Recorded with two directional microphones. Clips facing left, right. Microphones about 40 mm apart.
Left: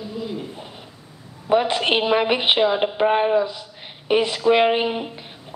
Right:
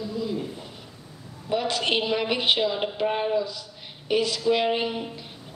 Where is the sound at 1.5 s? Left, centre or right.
Left.